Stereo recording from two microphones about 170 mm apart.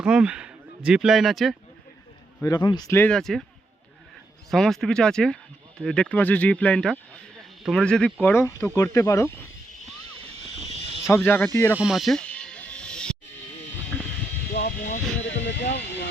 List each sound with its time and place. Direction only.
0.0 s speech: 5° right (ahead or behind)
2.4 s speech: 25° left (ahead or behind); by 3.4 s 5° left (ahead or behind)
4.5 s speech: centre (ahead or behind); by 9.3 s 15° left (ahead or behind)
11.1 s speech: 10° left (ahead or behind)
11.8 s snake: centre (ahead or behind)
14.8 s speech: 45° left (ahead or behind)
15.4 s speech: 90° left